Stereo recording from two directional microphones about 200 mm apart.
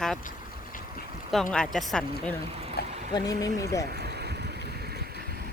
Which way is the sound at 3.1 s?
20° left (ahead or behind).